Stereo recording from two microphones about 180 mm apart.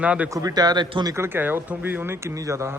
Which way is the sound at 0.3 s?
20° right (ahead or behind).